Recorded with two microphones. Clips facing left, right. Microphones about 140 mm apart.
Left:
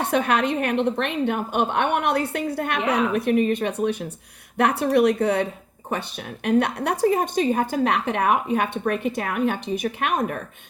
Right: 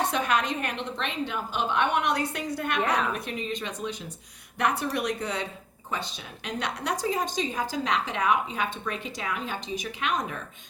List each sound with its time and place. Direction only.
0.0 s a woman's voice: 60° left (ahead or behind)